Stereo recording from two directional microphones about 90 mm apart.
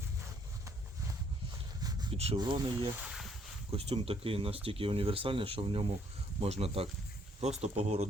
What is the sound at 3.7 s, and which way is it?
Speech, 90° right.